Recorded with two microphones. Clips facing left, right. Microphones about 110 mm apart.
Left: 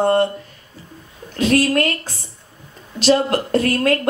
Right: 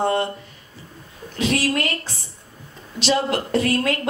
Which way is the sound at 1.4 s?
45° left (ahead or behind).